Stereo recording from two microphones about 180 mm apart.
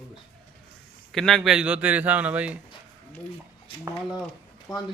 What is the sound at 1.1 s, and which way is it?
A man's voice, centre (ahead or behind).